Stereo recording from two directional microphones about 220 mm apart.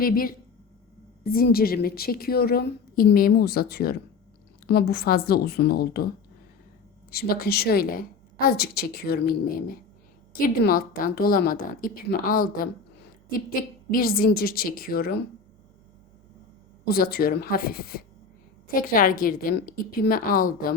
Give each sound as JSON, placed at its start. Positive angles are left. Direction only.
{"t": 0.0, "sound": "a woman's voice", "side_deg": 40}
{"t": 7.1, "sound": "a woman's voice", "side_deg": 45}
{"t": 16.9, "sound": "a woman's voice", "side_deg": 45}